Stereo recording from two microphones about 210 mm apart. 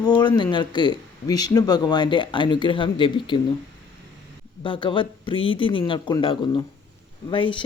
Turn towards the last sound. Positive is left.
turn(degrees=25)  # may be behind; listen again after turning